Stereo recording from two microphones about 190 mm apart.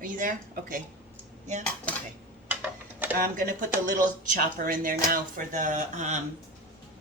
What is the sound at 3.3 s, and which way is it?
A woman's voice, 45° right (ahead or behind).